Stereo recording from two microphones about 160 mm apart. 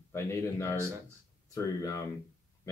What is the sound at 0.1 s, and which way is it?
Speech, 15° left (ahead or behind).